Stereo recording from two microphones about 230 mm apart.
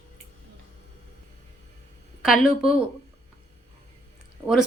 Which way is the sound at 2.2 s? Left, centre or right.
Centre.